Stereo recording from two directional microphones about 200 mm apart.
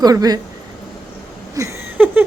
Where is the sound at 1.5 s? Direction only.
10° right (ahead or behind).